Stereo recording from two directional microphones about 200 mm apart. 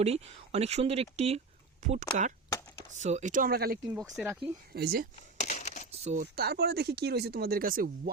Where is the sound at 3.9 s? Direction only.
Centre (ahead or behind).